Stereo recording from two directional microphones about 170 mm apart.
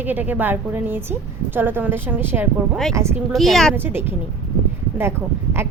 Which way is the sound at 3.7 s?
15° right (ahead or behind).